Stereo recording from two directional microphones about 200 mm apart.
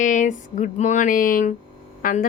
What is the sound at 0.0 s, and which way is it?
A woman's voice, 40° left (ahead or behind).